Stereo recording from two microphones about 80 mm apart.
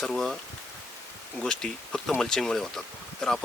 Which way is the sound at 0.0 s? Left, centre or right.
Centre.